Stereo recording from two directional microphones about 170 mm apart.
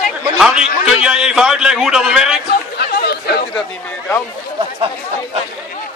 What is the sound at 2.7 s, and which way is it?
Chatter, 75° left (ahead or behind).